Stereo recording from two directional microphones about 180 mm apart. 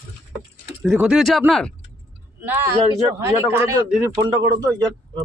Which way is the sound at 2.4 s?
15° right (ahead or behind).